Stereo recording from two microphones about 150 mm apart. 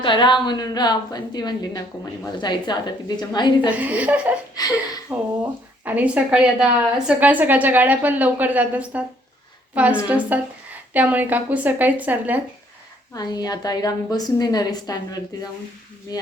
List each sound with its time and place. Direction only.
0.0 s a woman's voice: 30° left (ahead or behind)
3.7 s a woman's voice: 10° right (ahead or behind)
4.5 s a woman's voice: 25° left (ahead or behind)
5.4 s a woman's voice: 10° right (ahead or behind)
13.1 s a woman's voice: 25° left (ahead or behind)